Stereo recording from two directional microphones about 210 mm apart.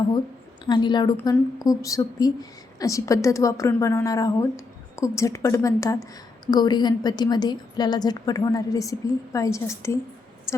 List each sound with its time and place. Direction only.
0.6 s a woman's voice: 20° left (ahead or behind)